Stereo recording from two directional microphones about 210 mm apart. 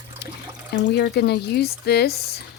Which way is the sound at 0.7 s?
50° left (ahead or behind).